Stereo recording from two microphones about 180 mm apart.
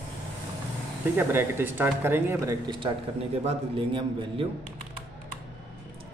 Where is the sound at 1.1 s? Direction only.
10° right (ahead or behind).